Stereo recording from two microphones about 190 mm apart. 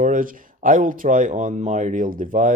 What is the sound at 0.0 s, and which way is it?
Speech, 45° right (ahead or behind).